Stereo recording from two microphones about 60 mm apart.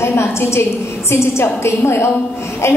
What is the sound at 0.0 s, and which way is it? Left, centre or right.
A woman's voice, left.